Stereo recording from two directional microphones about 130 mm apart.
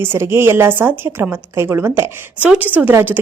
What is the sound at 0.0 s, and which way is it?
Speech, 15° right (ahead or behind).